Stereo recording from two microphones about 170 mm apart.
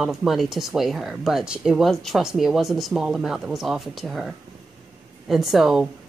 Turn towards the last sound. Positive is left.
turn(degrees=0)  # may be behind; listen again after turning